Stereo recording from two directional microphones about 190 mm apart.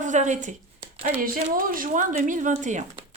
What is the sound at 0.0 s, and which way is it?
Speech, 40° right (ahead or behind).